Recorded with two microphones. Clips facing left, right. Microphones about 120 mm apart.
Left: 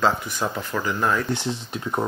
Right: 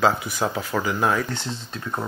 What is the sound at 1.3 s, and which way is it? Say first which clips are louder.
Speech: left 4 dB; 15° left (ahead or behind).